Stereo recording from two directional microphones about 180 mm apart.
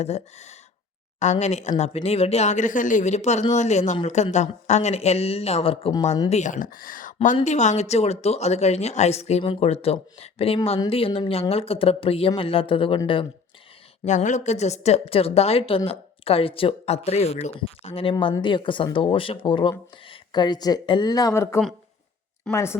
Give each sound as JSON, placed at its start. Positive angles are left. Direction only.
{"t": 0.0, "sound": "a woman's voice", "side_deg": 40}
{"t": 14.0, "sound": "a woman's voice", "side_deg": 40}